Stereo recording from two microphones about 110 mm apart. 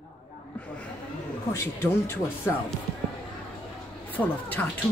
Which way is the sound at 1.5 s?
25° left (ahead or behind).